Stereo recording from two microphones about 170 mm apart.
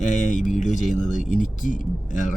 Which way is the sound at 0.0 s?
45° left (ahead or behind).